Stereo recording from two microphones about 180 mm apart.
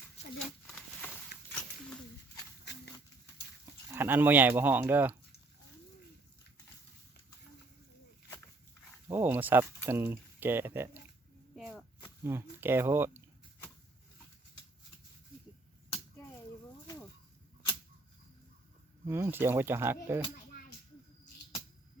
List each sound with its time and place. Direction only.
1.5 s a sound: 10° left (ahead or behind)
2.7 s horse: 70° left (ahead or behind)
3.9 s speech: 10° right (ahead or behind)
9.0 s speech: 10° right (ahead or behind)
11.5 s whip: centre (ahead or behind)
12.2 s speech: 15° right (ahead or behind)
19.0 s speech: 15° right (ahead or behind)